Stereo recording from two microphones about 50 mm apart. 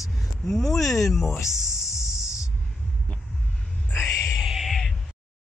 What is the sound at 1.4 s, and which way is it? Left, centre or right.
Music, left.